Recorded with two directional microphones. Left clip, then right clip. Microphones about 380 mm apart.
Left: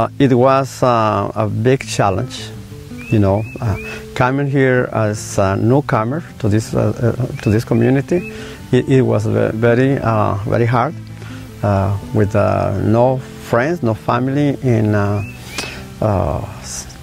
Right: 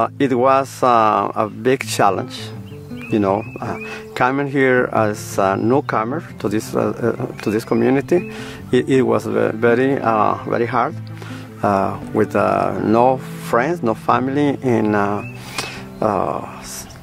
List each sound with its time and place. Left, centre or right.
0.0 s speech: left
11.6 s speech: left